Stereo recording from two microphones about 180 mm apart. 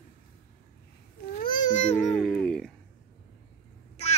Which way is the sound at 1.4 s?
50° left (ahead or behind).